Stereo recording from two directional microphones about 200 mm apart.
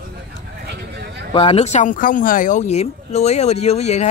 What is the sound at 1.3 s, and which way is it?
Speech, 30° left (ahead or behind).